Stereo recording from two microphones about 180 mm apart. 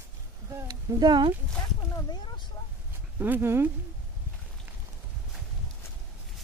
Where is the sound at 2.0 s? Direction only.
25° left (ahead or behind).